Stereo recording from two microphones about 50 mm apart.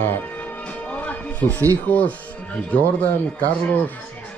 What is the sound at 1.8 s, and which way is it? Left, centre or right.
Speech, left.